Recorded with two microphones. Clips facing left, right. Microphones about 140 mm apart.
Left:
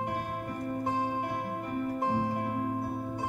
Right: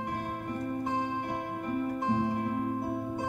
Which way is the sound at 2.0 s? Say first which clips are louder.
Right 1 dB; 35° left (ahead or behind).